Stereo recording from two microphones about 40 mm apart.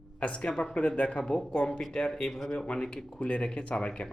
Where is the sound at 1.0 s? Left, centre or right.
Left.